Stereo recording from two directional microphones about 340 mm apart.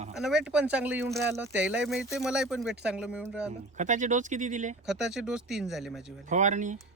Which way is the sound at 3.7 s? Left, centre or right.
Right.